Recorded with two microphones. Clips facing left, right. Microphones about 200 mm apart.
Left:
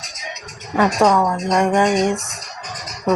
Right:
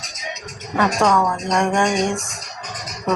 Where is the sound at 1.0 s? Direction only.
20° left (ahead or behind).